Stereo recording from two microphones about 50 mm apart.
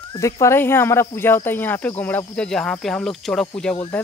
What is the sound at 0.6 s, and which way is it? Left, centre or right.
Speech, left.